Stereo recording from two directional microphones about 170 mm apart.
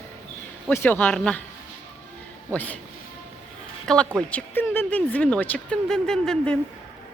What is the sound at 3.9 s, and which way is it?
A woman's voice, 5° left (ahead or behind).